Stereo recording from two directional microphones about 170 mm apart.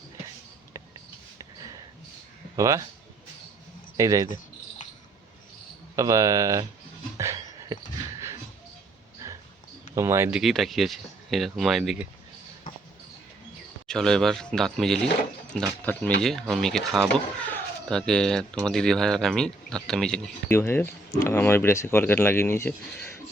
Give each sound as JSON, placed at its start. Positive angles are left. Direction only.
{"t": 2.6, "sound": "speech", "side_deg": -20}
{"t": 3.9, "sound": "speech", "side_deg": -20}
{"t": 4.8, "sound": "cricket", "side_deg": 45}
{"t": 6.0, "sound": "speech", "side_deg": -20}
{"t": 7.2, "sound": "a sound", "side_deg": -15}
{"t": 9.9, "sound": "speech", "side_deg": -15}
{"t": 10.3, "sound": "speech", "side_deg": 0}
{"t": 13.8, "sound": "speech", "side_deg": 5}